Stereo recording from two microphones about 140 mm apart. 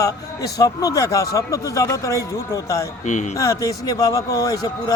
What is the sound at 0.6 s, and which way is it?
A man's voice, 25° left (ahead or behind).